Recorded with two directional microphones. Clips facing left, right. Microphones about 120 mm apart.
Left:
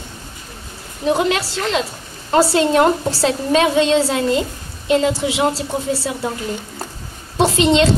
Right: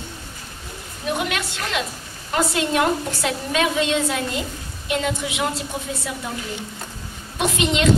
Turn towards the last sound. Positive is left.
turn(degrees=30)  # may be behind; listen again after turning